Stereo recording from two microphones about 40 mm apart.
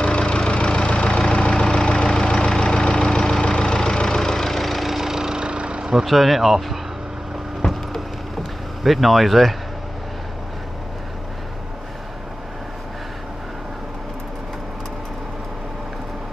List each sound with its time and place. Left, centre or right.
0.0 s engine: left
2.1 s vehicle: centre
4.2 s vehicle: centre; by 5.9 s right
5.9 s speech: centre
7.6 s a sound: centre
8.8 s speech: centre